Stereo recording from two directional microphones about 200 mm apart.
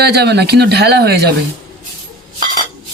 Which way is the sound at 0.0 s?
55° right (ahead or behind).